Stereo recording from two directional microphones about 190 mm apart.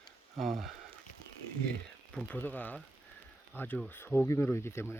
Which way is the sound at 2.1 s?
5° left (ahead or behind).